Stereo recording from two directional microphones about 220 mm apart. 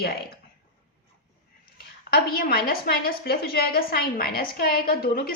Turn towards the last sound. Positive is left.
turn(degrees=40)  # may be behind; listen again after turning